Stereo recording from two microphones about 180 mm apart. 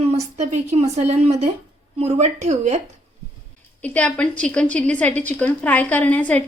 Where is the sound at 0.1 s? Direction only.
35° right (ahead or behind).